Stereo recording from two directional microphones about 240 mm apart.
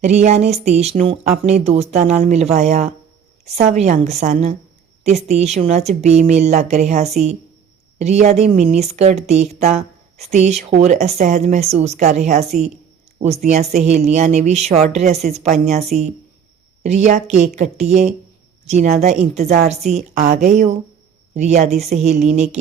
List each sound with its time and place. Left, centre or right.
0.0 s speech: right